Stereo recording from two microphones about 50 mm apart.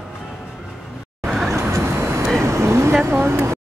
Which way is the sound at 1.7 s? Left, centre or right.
Right.